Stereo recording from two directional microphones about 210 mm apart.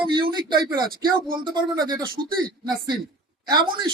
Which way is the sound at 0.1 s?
20° right (ahead or behind).